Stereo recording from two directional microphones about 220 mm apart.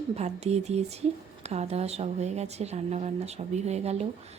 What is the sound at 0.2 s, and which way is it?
Speech, 30° right (ahead or behind).